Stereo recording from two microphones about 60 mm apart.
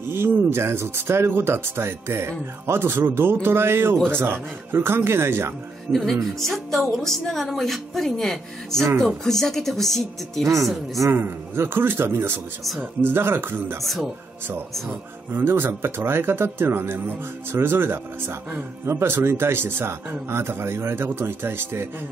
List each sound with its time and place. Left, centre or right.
0.1 s speech: right
5.9 s a woman's voice: centre
11.1 s speech: right
13.8 s a woman's voice: centre
14.9 s speech: right